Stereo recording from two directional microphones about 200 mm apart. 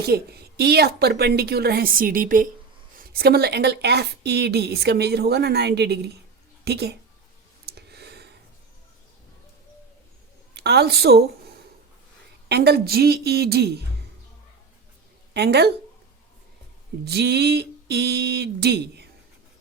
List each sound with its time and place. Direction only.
0.0 s a woman's voice: 50° right (ahead or behind)
7.6 s a sound: 55° right (ahead or behind)
10.5 s a woman's voice: 55° right (ahead or behind)
15.3 s speech: 55° right (ahead or behind)
17.1 s a woman's voice: 55° right (ahead or behind)